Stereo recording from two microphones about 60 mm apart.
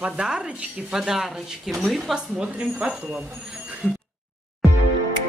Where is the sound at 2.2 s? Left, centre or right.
Centre.